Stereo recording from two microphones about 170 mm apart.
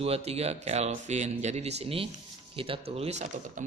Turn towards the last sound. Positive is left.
turn(degrees=-40)  # may be behind; listen again after turning